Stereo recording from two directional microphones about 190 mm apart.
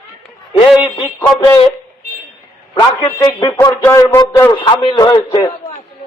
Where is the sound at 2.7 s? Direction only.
20° left (ahead or behind).